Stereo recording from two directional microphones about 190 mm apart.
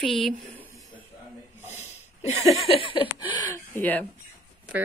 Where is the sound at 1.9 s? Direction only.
35° left (ahead or behind).